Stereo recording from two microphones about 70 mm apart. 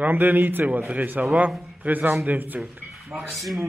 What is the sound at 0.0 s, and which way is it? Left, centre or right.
A man's voice, right.